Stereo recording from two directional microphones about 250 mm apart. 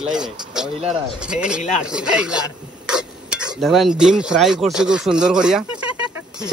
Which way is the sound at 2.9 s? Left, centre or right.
Centre.